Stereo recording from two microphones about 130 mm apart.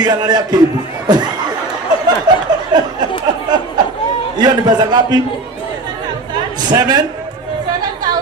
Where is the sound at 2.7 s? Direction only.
35° right (ahead or behind).